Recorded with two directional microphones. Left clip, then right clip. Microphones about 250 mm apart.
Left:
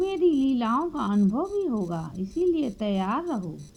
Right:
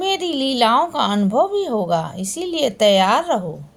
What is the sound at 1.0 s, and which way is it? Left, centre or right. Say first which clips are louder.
Speech: right 10 dB; left.